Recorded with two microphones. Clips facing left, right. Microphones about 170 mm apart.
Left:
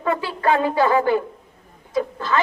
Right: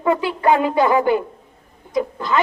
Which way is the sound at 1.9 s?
15° right (ahead or behind).